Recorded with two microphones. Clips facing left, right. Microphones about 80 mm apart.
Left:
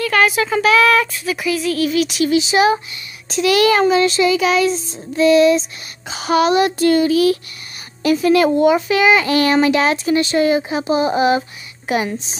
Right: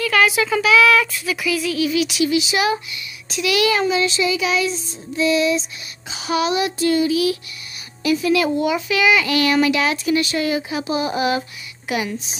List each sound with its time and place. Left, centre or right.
0.0 s a child's voice: left